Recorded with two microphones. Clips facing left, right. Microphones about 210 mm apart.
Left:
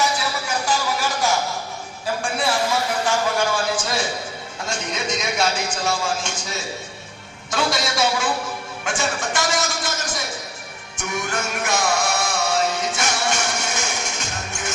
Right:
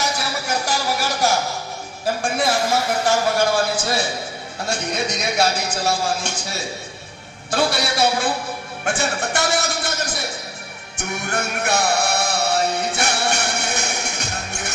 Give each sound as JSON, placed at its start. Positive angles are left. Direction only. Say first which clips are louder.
{"t": 0.0, "sound": "a sound", "louder": "left 1 dB", "side_deg": -40}
{"t": 4.9, "sound": "a man's voice", "louder": "right 1 dB", "side_deg": -35}
{"t": 7.5, "sound": "music", "louder": "right 2 dB", "side_deg": -60}
{"t": 11.8, "sound": "a man's voice", "louder": "right 1 dB", "side_deg": -35}
{"t": 12.1, "sound": "music", "louder": "right 1 dB", "side_deg": -35}
{"t": 13.0, "sound": "music", "louder": "right 1 dB", "side_deg": -60}